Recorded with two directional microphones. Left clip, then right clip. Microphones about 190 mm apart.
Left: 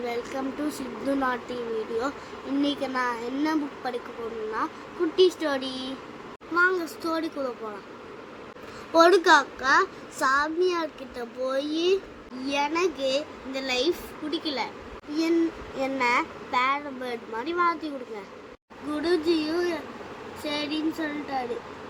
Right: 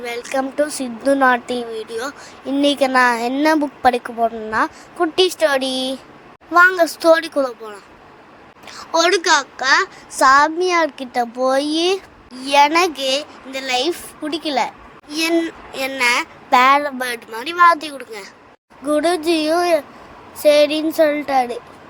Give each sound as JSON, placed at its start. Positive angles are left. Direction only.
{"t": 0.0, "sound": "a child's voice", "side_deg": -45}
{"t": 2.6, "sound": "a child's voice", "side_deg": -50}
{"t": 5.1, "sound": "a child's voice", "side_deg": -45}
{"t": 8.9, "sound": "a child's voice", "side_deg": -45}